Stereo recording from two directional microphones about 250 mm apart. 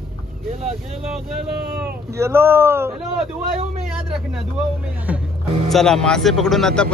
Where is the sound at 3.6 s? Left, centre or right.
Right.